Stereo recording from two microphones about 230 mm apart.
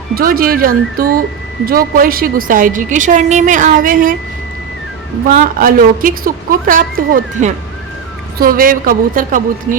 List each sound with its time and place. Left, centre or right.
0.1 s a woman's voice: right
5.3 s a woman's voice: right